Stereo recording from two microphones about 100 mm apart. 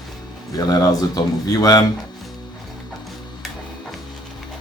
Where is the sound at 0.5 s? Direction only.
35° left (ahead or behind).